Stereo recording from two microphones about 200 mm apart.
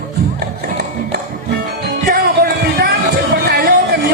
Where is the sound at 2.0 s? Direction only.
50° right (ahead or behind).